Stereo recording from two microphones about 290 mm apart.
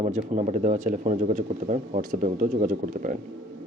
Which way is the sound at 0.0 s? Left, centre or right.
Right.